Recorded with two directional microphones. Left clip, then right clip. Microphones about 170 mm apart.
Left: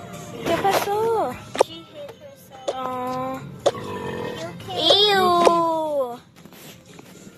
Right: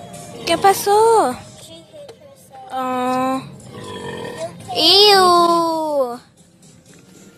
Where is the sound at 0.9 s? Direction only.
35° right (ahead or behind).